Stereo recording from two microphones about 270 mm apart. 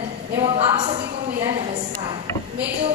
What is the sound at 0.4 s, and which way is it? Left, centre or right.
Speech, right.